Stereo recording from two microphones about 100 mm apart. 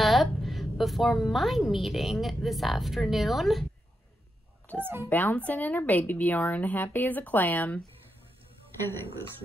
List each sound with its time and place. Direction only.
0.0 s a woman's voice: centre (ahead or behind)
4.7 s a sound: 15° left (ahead or behind)
5.1 s speech: 15° left (ahead or behind)